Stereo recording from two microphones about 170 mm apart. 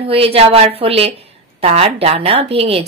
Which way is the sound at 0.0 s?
35° right (ahead or behind).